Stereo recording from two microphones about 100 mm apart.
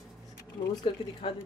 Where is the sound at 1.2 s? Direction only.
60° left (ahead or behind).